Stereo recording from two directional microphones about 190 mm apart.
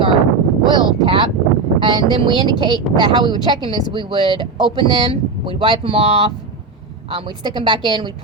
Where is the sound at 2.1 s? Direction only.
25° right (ahead or behind).